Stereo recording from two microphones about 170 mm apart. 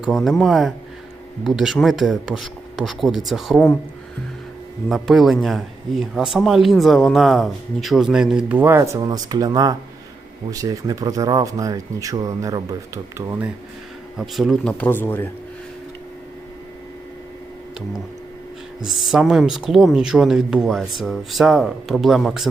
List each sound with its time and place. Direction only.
0.0 s a man's voice: centre (ahead or behind)
4.9 s a man's voice: centre (ahead or behind); by 13.5 s 15° right (ahead or behind)
14.2 s speech: centre (ahead or behind)
18.9 s a man's voice: centre (ahead or behind)